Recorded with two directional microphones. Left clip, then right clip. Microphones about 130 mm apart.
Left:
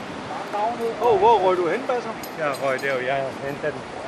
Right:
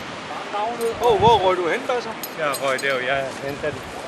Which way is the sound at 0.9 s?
45° right (ahead or behind).